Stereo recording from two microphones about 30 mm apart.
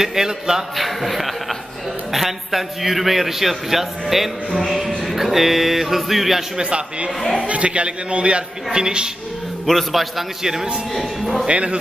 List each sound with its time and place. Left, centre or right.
0.0 s speech: centre
0.7 s a man's voice: centre
4.6 s a man's voice: centre
5.0 s speech: centre
6.6 s a man's voice: right
7.2 s speech: centre
7.4 s a man's voice: right
8.7 s a woman's voice: right
9.7 s a man's voice: centre
10.4 s speech: centre
10.9 s a man's voice: centre
11.4 s a man's voice: right